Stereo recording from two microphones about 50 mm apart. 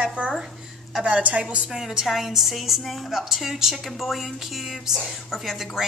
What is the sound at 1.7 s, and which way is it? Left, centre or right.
A woman's voice, centre.